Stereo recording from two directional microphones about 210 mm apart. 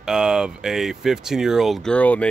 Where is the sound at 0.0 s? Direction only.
5° right (ahead or behind).